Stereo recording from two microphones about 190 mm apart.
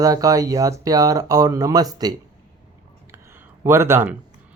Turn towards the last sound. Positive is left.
turn(degrees=-10)  # may be behind; listen again after turning